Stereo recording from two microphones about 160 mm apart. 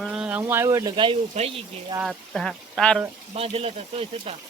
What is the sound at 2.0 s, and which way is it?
Speech, centre (ahead or behind).